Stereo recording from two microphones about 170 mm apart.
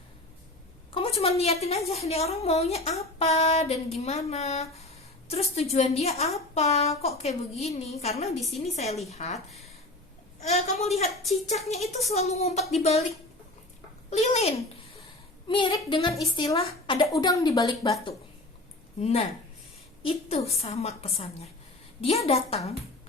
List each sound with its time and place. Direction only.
0.9 s a woman's voice: 35° left (ahead or behind)
10.4 s a woman's voice: 40° left (ahead or behind)
12.1 s a woman's voice: 40° left (ahead or behind)
14.1 s a woman's voice: 40° left (ahead or behind)
15.4 s a woman's voice: 30° left (ahead or behind)
18.9 s a woman's voice: 40° left (ahead or behind)